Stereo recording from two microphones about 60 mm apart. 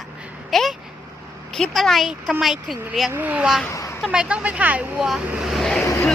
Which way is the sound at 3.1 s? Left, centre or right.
Right.